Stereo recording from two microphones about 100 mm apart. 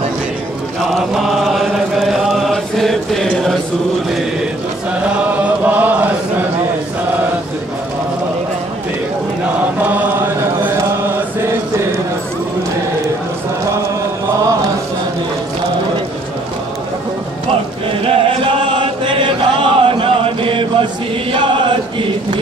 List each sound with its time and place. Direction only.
0.7 s chant: 5° right (ahead or behind)
5.0 s chant: 15° right (ahead or behind)
9.8 s chant: 15° right (ahead or behind)
18.0 s chant: 65° right (ahead or behind)